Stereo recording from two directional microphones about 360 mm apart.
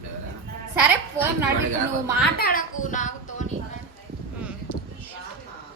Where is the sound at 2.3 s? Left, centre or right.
Left.